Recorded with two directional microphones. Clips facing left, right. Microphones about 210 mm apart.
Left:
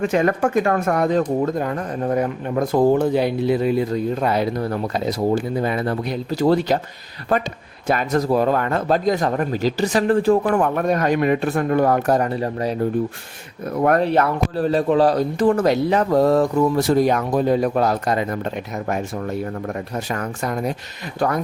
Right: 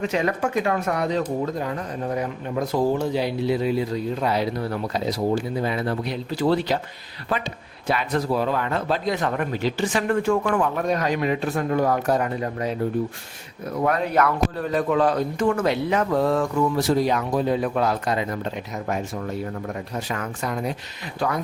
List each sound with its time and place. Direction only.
0.0 s speech: 50° left (ahead or behind)
7.9 s speech: 45° left (ahead or behind)
10.6 s speech: 55° left (ahead or behind); by 12.7 s 35° left (ahead or behind)
14.0 s speech: 30° left (ahead or behind)
16.9 s speech: 50° left (ahead or behind)